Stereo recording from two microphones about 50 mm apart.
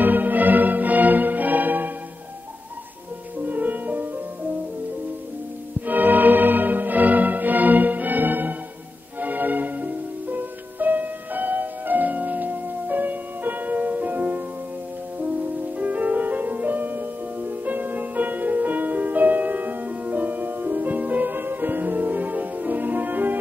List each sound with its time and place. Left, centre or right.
0.0 s music: right
3.4 s music: right
5.8 s music: right